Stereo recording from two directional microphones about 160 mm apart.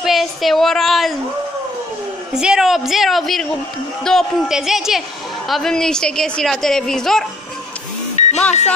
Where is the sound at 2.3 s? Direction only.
5° right (ahead or behind).